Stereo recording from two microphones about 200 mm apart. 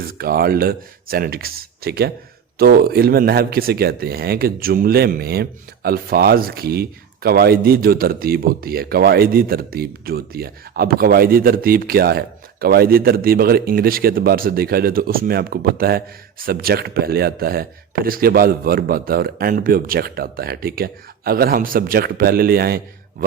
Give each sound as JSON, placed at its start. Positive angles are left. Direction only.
{"t": 0.0, "sound": "speech", "side_deg": -45}